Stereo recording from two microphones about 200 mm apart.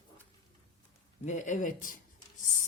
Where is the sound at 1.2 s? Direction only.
35° left (ahead or behind).